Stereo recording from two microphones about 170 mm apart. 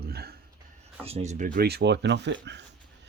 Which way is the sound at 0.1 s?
65° right (ahead or behind).